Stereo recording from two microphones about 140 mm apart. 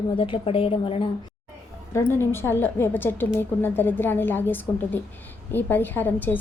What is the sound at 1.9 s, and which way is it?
A woman's voice, 15° left (ahead or behind).